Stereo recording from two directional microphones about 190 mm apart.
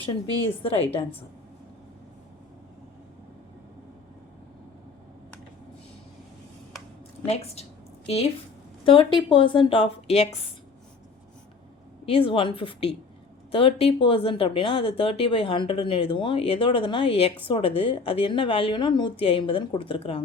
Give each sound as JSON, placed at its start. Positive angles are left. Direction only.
{"t": 0.0, "sound": "speech", "side_deg": 30}
{"t": 7.3, "sound": "a woman's voice", "side_deg": 35}
{"t": 12.0, "sound": "speech", "side_deg": 30}